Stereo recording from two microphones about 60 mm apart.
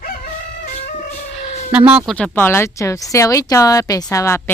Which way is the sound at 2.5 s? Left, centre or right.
Left.